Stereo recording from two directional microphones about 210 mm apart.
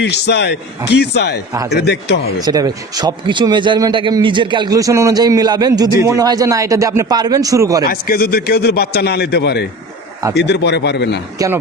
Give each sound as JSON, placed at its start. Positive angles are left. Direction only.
{"t": 0.0, "sound": "a man's voice", "side_deg": 55}
{"t": 2.4, "sound": "a man's voice", "side_deg": -20}
{"t": 7.9, "sound": "a man's voice", "side_deg": 45}